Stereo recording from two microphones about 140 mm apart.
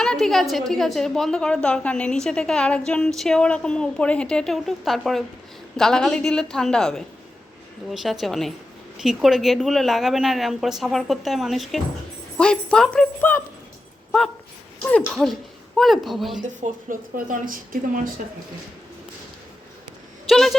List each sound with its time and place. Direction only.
0.0 s a woman's voice: 5° left (ahead or behind)
14.8 s a woman's voice: 10° left (ahead or behind)
16.4 s speech: 70° right (ahead or behind)
20.2 s a woman's voice: centre (ahead or behind)